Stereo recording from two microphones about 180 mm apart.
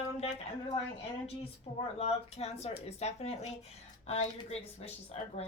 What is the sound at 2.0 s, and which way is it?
Speech, 35° left (ahead or behind).